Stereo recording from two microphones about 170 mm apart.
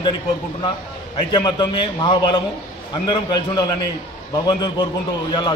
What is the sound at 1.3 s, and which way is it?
A man's voice, 25° left (ahead or behind).